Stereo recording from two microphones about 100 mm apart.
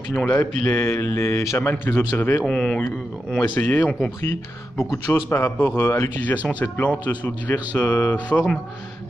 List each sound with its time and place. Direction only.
0.2 s a man's voice: 15° left (ahead or behind)
2.4 s speech: 5° left (ahead or behind)
3.4 s a man's voice: 20° left (ahead or behind)